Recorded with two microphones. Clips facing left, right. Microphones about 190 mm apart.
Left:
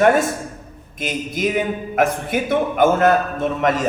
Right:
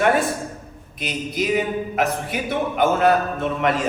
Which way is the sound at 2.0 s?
50° left (ahead or behind).